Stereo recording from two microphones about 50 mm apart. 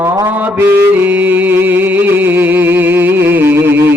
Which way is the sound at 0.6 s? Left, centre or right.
Right.